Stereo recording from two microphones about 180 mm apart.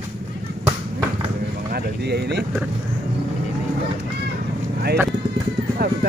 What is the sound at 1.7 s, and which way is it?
Speech, 65° right (ahead or behind).